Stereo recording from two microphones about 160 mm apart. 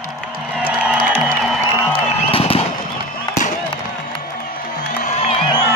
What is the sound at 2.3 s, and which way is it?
Fireworks, 35° left (ahead or behind).